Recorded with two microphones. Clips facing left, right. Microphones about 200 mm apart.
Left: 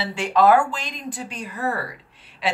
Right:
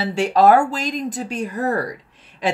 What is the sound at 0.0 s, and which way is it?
Speech, 40° right (ahead or behind).